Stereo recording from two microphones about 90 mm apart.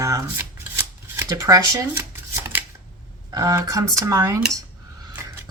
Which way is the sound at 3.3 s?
40° right (ahead or behind).